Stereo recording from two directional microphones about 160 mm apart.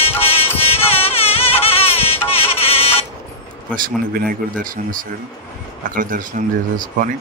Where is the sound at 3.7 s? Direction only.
60° right (ahead or behind).